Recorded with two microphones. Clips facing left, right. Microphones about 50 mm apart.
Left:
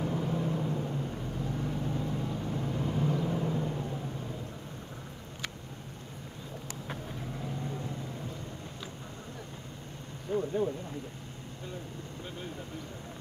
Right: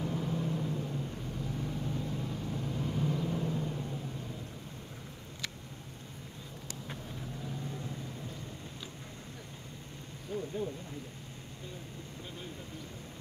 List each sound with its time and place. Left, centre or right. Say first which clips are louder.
0.0 s vehicle: left 3 dB; centre
7.4 s vehicle: left 3 dB; left
10.3 s a sound: left 6 dB; left